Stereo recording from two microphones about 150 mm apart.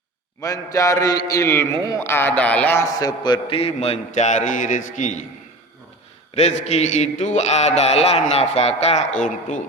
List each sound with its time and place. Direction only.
0.4 s mantra: 20° left (ahead or behind)
1.8 s speech: 20° left (ahead or behind)
3.0 s a man's voice: 25° left (ahead or behind); by 5.2 s 55° left (ahead or behind)
6.3 s a man's voice: 45° left (ahead or behind)